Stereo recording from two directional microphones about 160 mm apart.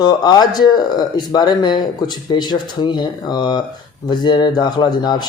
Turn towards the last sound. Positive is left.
turn(degrees=25)  # may be behind; listen again after turning